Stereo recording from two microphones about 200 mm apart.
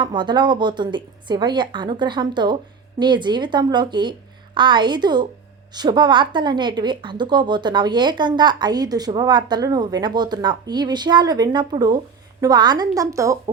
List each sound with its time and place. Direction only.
0.0 s a woman's voice: 25° right (ahead or behind)